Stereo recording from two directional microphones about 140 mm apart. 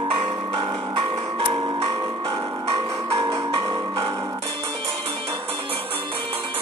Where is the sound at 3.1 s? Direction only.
20° right (ahead or behind).